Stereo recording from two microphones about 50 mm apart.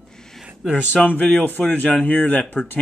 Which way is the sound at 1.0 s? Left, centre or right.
Left.